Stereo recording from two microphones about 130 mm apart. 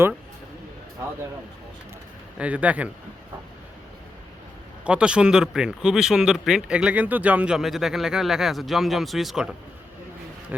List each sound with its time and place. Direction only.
2.4 s speech: 10° right (ahead or behind)
4.9 s speech: 10° right (ahead or behind)